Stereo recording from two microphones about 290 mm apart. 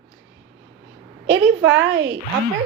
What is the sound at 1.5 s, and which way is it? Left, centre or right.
Speech, right.